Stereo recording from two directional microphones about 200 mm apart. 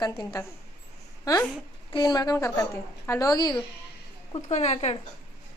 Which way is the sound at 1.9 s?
20° left (ahead or behind).